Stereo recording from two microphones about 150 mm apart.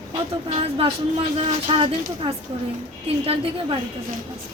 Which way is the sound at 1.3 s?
35° right (ahead or behind).